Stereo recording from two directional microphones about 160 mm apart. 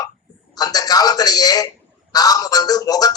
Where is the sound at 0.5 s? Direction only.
25° left (ahead or behind).